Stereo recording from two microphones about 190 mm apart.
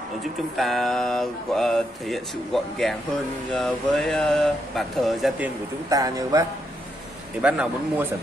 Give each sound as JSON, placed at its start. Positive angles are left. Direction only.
{"t": 0.6, "sound": "speech", "side_deg": 0}
{"t": 5.9, "sound": "speech", "side_deg": -20}
{"t": 7.4, "sound": "speech", "side_deg": -5}